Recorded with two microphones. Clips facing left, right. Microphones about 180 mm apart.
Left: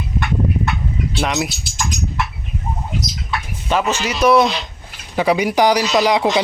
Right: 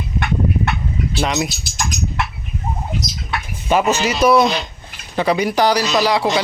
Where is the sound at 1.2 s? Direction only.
Centre (ahead or behind).